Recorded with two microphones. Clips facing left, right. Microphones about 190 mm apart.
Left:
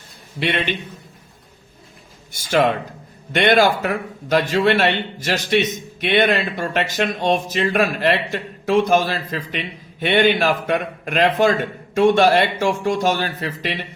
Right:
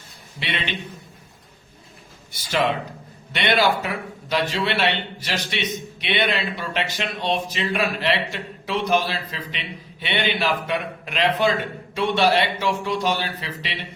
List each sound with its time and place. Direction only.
0.3 s a man's voice: 50° left (ahead or behind)
2.3 s a man's voice: 50° left (ahead or behind)